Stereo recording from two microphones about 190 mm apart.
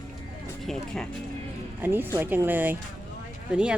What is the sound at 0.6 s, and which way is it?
Speech, centre (ahead or behind).